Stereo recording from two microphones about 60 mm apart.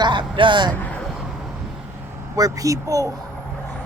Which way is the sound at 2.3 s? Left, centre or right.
Right.